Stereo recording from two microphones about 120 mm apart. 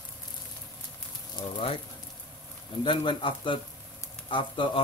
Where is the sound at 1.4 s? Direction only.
40° left (ahead or behind).